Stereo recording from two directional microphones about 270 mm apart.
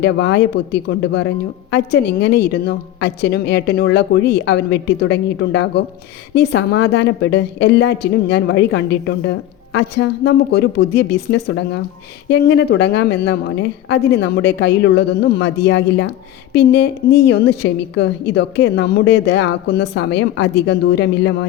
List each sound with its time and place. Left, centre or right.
0.0 s a woman's voice: left